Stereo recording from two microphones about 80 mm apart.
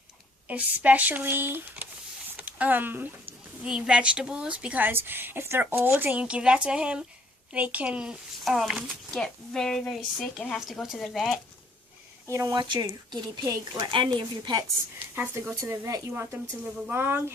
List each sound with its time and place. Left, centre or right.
0.4 s speech: centre
2.3 s a sound: centre
3.7 s a woman's voice: centre
9.1 s a woman's voice: centre
12.3 s speech: right
12.5 s speech: right
13.9 s speech: right
15.4 s speech: right